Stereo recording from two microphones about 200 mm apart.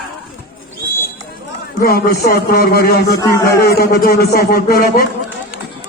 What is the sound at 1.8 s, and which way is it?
Music, 50° left (ahead or behind).